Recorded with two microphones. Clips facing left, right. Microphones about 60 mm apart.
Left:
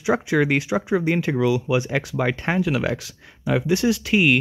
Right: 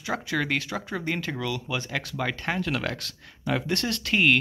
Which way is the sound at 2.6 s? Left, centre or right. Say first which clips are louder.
Left 6 dB; centre.